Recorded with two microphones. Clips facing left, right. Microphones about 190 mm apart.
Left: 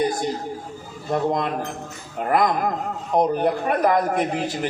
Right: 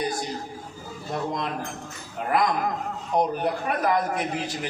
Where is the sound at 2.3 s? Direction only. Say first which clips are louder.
Left 3 dB; 50° left (ahead or behind).